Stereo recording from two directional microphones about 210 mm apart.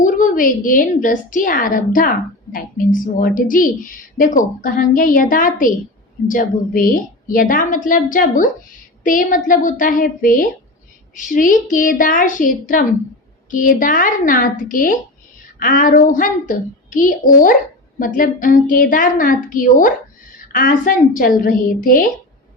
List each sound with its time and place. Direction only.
0.0 s a woman's voice: 40° left (ahead or behind)